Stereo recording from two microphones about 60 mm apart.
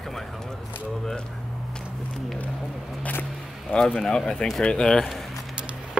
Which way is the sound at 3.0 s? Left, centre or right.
Left.